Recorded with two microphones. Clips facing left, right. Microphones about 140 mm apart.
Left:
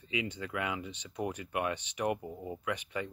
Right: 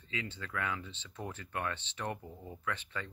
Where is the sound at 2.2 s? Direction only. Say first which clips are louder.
Left 4 dB; 25° left (ahead or behind).